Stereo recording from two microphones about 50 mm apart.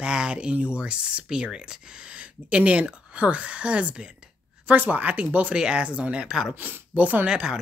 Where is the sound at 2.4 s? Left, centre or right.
Right.